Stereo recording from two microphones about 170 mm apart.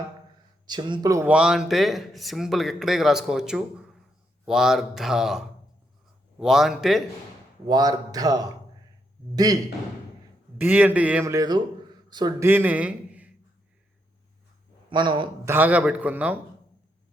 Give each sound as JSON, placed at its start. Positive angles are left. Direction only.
{"t": 0.7, "sound": "speech", "side_deg": -25}
{"t": 1.3, "sound": "speech", "side_deg": -5}
{"t": 7.7, "sound": "speech", "side_deg": -20}
{"t": 10.6, "sound": "a man's voice", "side_deg": -10}
{"t": 12.5, "sound": "a man's voice", "side_deg": -10}
{"t": 14.8, "sound": "a man's voice", "side_deg": -30}
{"t": 15.4, "sound": "a man's voice", "side_deg": -10}